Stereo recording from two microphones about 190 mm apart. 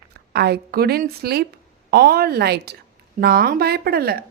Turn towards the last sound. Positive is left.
turn(degrees=-55)  # may be behind; listen again after turning